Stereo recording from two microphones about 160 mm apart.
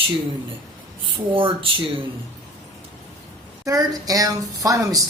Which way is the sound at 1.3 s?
35° right (ahead or behind).